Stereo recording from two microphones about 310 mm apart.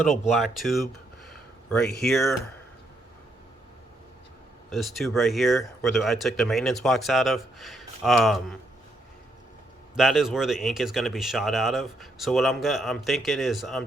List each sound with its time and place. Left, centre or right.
0.0 s speech: centre
4.7 s speech: centre
9.9 s speech: centre